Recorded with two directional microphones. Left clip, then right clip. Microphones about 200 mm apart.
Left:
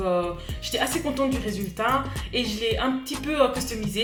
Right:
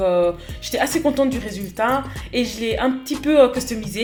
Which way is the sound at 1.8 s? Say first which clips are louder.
Right 4 dB; 40° right (ahead or behind).